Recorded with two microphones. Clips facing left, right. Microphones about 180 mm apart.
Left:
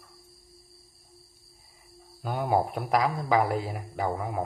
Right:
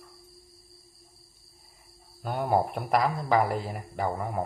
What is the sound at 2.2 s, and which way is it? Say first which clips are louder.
Speech: even; centre (ahead or behind).